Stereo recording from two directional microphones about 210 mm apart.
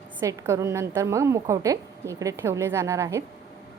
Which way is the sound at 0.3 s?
15° right (ahead or behind).